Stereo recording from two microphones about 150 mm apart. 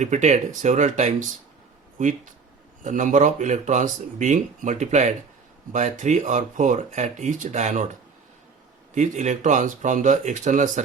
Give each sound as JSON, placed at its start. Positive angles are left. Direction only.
{"t": 0.0, "sound": "speech", "side_deg": -50}
{"t": 9.0, "sound": "speech", "side_deg": -55}